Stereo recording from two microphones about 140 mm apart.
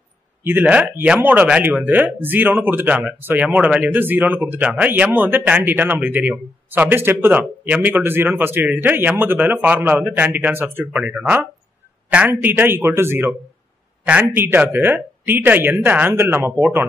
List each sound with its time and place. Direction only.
0.4 s speech: 15° right (ahead or behind)